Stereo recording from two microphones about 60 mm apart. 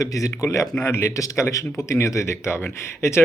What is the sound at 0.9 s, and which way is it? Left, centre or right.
Speech, left.